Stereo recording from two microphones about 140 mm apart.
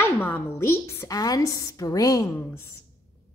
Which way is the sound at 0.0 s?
15° left (ahead or behind).